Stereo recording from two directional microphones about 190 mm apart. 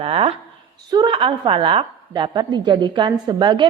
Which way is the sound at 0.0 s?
30° right (ahead or behind).